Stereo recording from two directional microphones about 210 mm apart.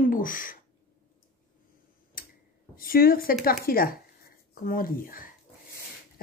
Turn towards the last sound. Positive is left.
turn(degrees=40)  # may be behind; listen again after turning